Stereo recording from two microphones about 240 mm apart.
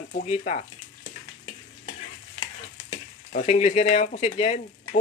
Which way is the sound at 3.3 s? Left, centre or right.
Left.